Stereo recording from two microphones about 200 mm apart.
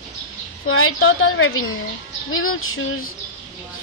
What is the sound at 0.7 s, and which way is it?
Speech, 90° left.